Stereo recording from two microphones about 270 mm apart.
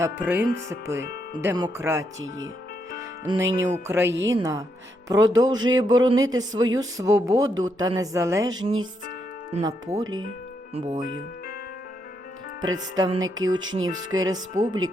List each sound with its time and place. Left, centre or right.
0.0 s speech: centre
4.1 s music: right
4.4 s speech: centre
12.6 s speech: centre
13.1 s music: right
13.5 s speech: centre
13.7 s music: right
14.2 s speech: centre